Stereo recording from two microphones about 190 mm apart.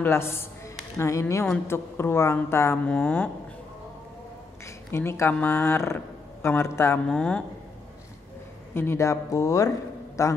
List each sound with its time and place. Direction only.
0.0 s speech: 15° left (ahead or behind)
4.9 s speech: 15° left (ahead or behind)
8.7 s speech: 15° left (ahead or behind)